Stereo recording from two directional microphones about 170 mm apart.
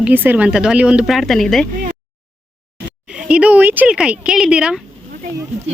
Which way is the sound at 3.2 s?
5° right (ahead or behind).